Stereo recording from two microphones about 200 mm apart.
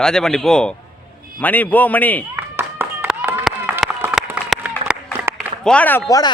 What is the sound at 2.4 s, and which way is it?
Clapping, 10° right (ahead or behind).